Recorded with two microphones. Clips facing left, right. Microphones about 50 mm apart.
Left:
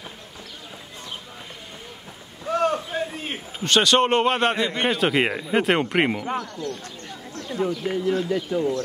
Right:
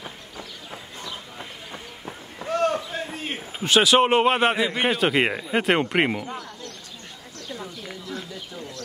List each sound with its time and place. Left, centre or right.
2.4 s a sound: centre
3.5 s a man's voice: centre
7.3 s speech: left